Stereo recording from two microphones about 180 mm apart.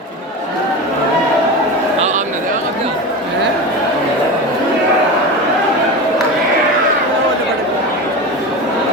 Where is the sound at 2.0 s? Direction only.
40° right (ahead or behind).